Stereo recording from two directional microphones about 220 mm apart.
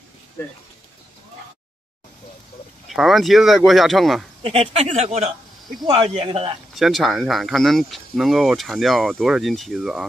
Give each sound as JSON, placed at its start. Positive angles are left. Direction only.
{"t": 2.9, "sound": "speech", "side_deg": 0}
{"t": 4.4, "sound": "speech", "side_deg": -25}
{"t": 6.7, "sound": "speech", "side_deg": 0}